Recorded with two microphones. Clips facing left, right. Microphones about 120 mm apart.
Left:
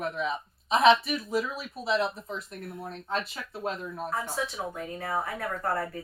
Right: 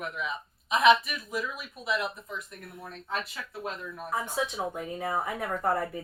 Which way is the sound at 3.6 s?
30° left (ahead or behind).